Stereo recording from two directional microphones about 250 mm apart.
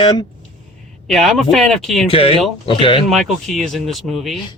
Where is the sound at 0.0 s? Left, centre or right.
Centre.